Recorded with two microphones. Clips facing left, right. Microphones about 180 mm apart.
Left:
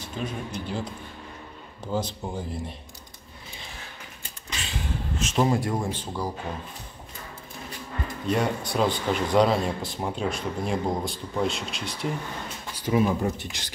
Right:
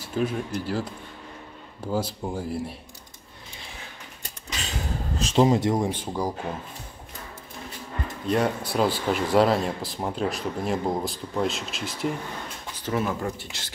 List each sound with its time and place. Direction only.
0.0 s speech: 5° right (ahead or behind)
4.6 s a sound: 40° right (ahead or behind)
5.4 s speech: 20° right (ahead or behind)
8.3 s speech: centre (ahead or behind)
12.7 s speech: 10° left (ahead or behind)